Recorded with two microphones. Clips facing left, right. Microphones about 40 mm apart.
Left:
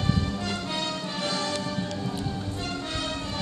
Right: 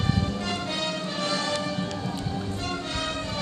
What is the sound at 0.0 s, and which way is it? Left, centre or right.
Music, centre.